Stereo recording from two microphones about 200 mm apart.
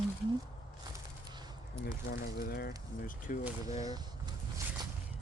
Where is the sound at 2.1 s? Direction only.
50° left (ahead or behind).